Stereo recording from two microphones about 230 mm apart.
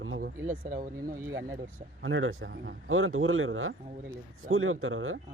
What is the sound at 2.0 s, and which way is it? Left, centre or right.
Speech, right.